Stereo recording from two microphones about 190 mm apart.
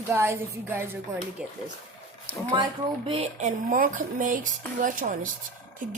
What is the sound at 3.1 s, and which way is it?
Speech, 30° right (ahead or behind).